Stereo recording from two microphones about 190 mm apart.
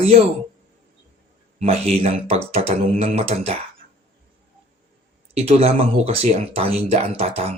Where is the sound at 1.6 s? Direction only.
30° right (ahead or behind).